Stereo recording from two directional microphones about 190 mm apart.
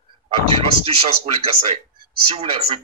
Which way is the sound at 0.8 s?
30° right (ahead or behind).